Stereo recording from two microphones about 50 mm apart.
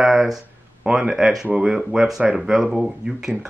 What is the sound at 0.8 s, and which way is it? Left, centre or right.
Speech, centre.